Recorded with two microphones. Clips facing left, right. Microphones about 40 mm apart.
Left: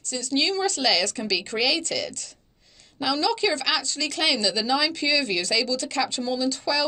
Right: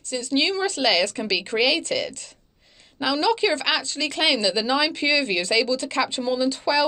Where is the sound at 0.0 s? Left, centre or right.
Right.